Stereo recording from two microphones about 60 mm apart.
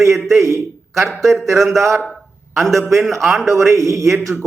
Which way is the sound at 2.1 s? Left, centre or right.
Centre.